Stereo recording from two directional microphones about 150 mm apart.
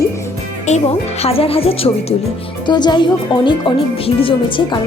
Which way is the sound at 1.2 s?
40° left (ahead or behind).